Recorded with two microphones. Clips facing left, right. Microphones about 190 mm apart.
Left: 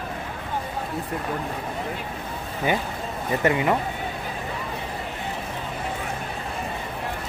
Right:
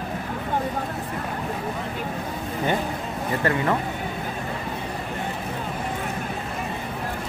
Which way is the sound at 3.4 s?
15° left (ahead or behind).